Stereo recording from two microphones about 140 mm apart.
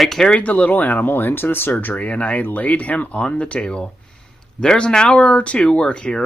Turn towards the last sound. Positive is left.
turn(degrees=5)  # may be behind; listen again after turning